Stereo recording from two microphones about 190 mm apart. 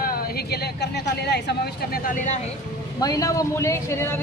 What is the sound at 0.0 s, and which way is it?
Speech, 50° left (ahead or behind).